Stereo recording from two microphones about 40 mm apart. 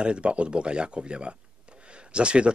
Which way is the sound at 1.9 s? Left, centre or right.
Right.